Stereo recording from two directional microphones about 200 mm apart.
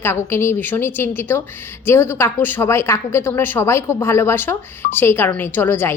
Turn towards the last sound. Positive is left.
turn(degrees=10)  # may be behind; listen again after turning